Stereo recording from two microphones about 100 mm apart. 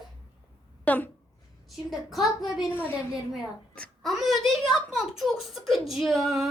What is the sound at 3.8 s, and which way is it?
A woman's voice, centre (ahead or behind).